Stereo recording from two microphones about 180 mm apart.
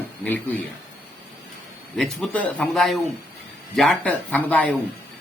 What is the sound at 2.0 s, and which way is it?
A man's voice, 5° left (ahead or behind).